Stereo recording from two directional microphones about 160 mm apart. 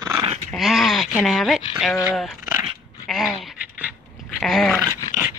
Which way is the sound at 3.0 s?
Centre (ahead or behind).